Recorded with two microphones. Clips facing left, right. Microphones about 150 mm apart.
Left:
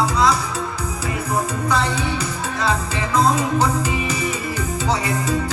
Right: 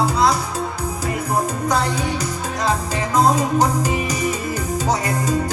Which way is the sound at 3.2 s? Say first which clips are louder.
Right 2 dB; 45° right (ahead or behind).